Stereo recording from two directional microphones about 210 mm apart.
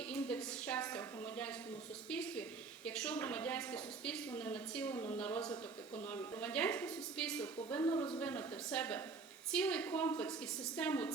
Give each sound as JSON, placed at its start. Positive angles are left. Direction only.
{"t": 0.1, "sound": "a sound", "side_deg": 5}
{"t": 2.0, "sound": "a woman's voice", "side_deg": 5}
{"t": 5.5, "sound": "a man's voice", "side_deg": 30}
{"t": 6.1, "sound": "a woman's voice", "side_deg": 10}
{"t": 8.2, "sound": "a woman's voice", "side_deg": 5}